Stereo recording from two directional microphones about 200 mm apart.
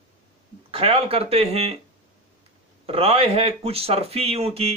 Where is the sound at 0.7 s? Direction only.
30° right (ahead or behind).